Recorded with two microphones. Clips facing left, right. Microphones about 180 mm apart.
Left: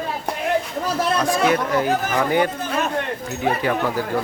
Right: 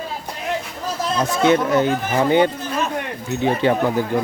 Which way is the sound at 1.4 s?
25° right (ahead or behind).